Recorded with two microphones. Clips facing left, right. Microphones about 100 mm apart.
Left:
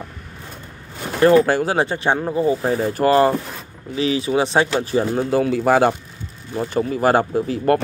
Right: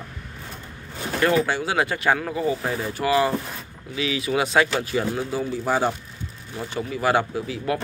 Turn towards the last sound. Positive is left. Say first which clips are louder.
# left 8 dB
turn(degrees=45)  # may be behind; listen again after turning